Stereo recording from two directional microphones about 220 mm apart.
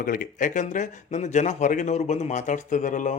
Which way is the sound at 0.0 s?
40° left (ahead or behind).